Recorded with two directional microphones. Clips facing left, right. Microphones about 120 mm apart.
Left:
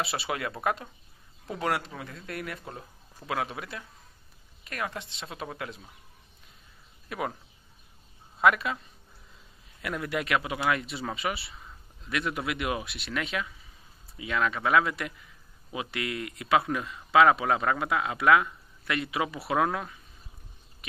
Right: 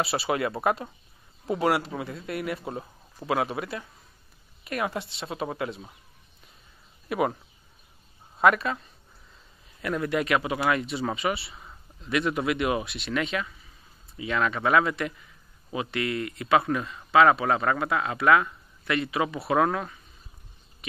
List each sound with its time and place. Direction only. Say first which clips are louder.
0.0 s a man's voice: right 5 dB; 5° right (ahead or behind)
2.6 s speech: right 7 dB; 20° right (ahead or behind)
3.3 s a man's voice: right 5 dB; 5° right (ahead or behind)
7.1 s speech: right 7 dB; 5° right (ahead or behind)
8.4 s a man's voice: right 2 dB; centre (ahead or behind)
9.8 s a man's voice: right 5 dB; 5° left (ahead or behind)